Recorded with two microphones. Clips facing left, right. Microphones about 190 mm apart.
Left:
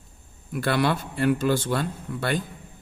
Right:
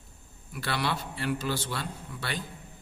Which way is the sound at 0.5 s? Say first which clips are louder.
Left 8 dB; 50° left (ahead or behind).